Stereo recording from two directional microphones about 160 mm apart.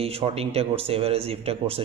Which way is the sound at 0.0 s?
40° right (ahead or behind).